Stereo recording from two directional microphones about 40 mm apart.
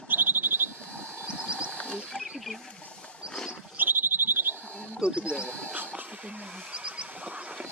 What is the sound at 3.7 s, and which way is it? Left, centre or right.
Frog, right.